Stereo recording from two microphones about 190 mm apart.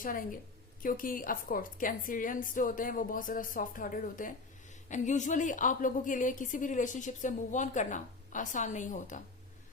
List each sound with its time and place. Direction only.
0.0 s a woman's voice: 45° left (ahead or behind)